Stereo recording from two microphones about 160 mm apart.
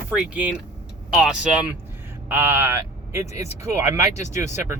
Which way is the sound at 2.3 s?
15° right (ahead or behind).